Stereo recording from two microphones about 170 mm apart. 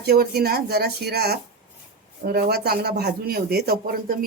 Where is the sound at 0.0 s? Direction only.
65° right (ahead or behind).